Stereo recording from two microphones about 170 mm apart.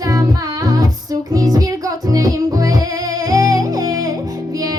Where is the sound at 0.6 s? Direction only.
20° right (ahead or behind).